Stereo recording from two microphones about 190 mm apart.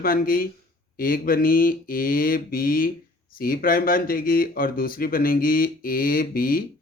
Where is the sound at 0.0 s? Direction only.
50° left (ahead or behind).